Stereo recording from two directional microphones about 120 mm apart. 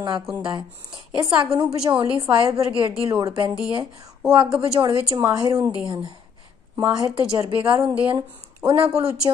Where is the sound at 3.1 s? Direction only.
30° right (ahead or behind).